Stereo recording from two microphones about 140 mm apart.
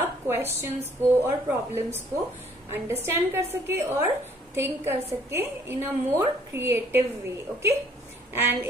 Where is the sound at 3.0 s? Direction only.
15° right (ahead or behind).